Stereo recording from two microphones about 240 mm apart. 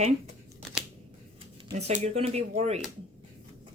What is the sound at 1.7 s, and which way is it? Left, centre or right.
Speech, right.